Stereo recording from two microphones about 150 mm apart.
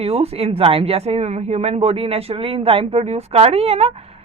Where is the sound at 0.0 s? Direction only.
40° right (ahead or behind).